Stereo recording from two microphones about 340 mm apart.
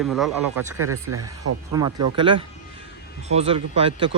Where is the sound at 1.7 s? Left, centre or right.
Centre.